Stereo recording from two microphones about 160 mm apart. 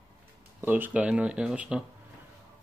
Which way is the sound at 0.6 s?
10° right (ahead or behind).